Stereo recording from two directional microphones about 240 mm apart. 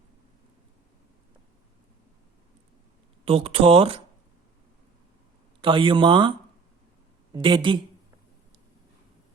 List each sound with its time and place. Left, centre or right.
3.2 s speech: right
5.6 s speech: right
7.3 s speech: centre